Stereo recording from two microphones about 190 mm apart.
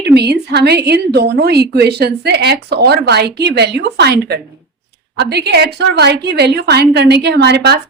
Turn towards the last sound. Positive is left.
turn(degrees=-60)  # may be behind; listen again after turning